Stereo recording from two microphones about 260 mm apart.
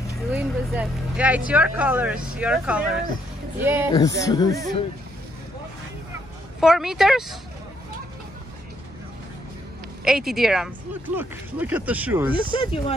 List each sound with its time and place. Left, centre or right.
0.3 s speech: centre
3.9 s speech: centre
6.6 s speech: centre
10.0 s speech: centre
12.4 s speech: left